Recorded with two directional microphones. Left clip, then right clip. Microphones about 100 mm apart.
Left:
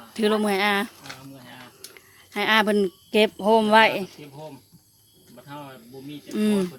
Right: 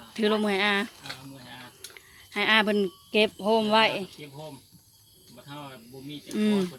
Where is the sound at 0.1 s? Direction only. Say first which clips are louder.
Left 3 dB; 20° left (ahead or behind).